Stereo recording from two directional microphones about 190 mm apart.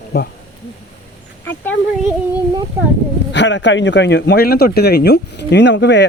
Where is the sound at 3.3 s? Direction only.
70° left (ahead or behind).